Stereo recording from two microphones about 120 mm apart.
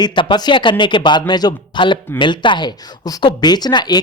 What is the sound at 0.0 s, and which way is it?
Speech, 40° left (ahead or behind).